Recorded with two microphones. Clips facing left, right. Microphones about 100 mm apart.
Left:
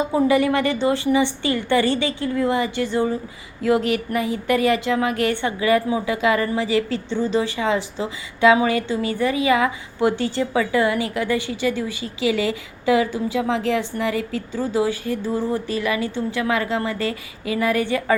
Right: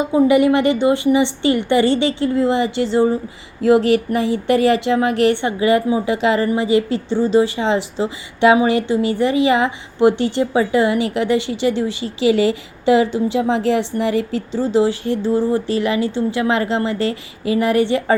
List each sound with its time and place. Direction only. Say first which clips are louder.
0.3 s a woman's voice: right 6 dB; 20° right (ahead or behind)